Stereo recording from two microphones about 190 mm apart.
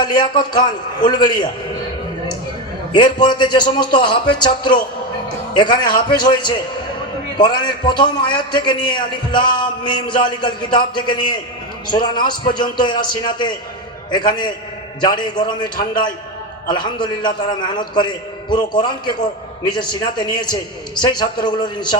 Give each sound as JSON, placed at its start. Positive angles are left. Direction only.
{"t": 0.0, "sound": "a man's voice", "side_deg": 20}
{"t": 2.9, "sound": "a man's voice", "side_deg": 25}